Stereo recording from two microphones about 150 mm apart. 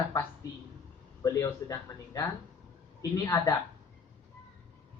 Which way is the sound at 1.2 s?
20° left (ahead or behind).